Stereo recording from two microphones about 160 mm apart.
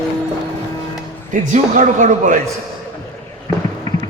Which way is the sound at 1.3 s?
50° right (ahead or behind).